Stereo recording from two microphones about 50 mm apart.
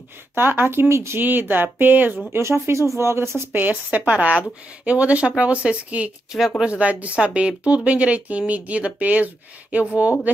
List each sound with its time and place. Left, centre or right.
0.4 s speech: right
1.2 s speech: right
2.3 s speech: right
3.5 s speech: right